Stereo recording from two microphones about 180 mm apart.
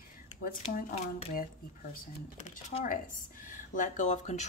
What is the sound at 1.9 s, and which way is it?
Speech, 50° left (ahead or behind).